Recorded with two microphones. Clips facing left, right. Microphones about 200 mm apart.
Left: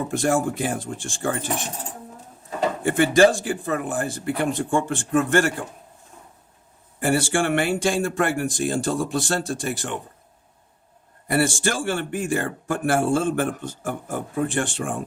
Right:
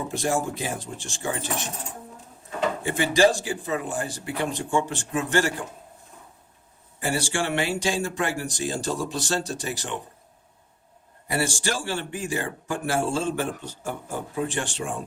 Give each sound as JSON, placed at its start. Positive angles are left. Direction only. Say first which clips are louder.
{"t": 0.1, "sound": "speech", "louder": "left 4 dB", "side_deg": 55}
{"t": 2.8, "sound": "speech", "louder": "left 4 dB", "side_deg": 55}
{"t": 7.0, "sound": "speech", "louder": "left 5 dB", "side_deg": 55}
{"t": 11.3, "sound": "speech", "louder": "left 5 dB", "side_deg": 55}